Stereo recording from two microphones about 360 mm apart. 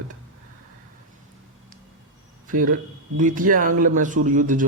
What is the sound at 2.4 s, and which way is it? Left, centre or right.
Speech, right.